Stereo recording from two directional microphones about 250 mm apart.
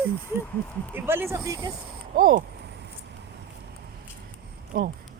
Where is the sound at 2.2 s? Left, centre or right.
Right.